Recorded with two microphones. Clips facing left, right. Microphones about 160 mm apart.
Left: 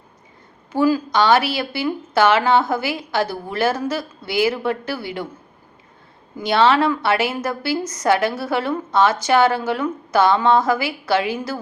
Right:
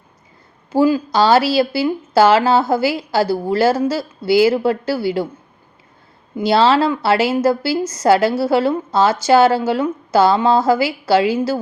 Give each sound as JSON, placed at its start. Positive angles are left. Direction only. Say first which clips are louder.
{"t": 0.7, "sound": "speech", "louder": "right 3 dB", "side_deg": -30}
{"t": 6.3, "sound": "a woman's voice", "louder": "right 3 dB", "side_deg": -30}